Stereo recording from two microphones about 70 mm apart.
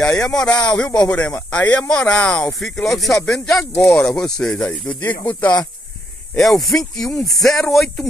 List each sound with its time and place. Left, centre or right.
0.1 s speech: centre
1.8 s speech: centre
4.6 s speech: left
6.3 s speech: centre